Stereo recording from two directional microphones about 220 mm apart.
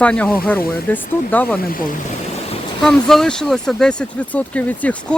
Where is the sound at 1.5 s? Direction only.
40° left (ahead or behind).